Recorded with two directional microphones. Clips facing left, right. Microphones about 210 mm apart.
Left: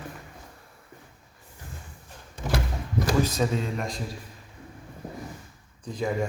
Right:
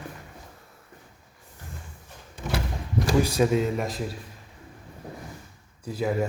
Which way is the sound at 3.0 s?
10° right (ahead or behind).